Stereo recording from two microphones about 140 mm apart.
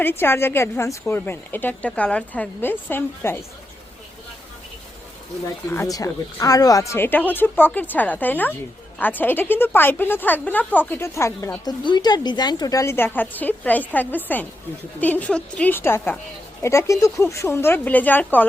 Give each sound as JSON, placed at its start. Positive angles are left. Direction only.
{"t": 0.0, "sound": "a woman's voice", "side_deg": 15}
{"t": 5.7, "sound": "a woman's voice", "side_deg": 20}
{"t": 11.8, "sound": "a woman's voice", "side_deg": 30}